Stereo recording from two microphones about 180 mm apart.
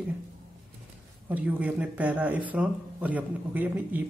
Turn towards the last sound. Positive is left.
turn(degrees=-10)  # may be behind; listen again after turning